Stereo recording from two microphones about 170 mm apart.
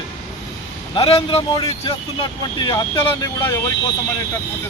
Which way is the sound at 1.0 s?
30° left (ahead or behind).